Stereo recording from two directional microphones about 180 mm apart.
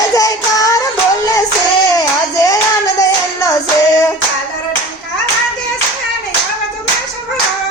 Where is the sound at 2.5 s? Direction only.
15° left (ahead or behind).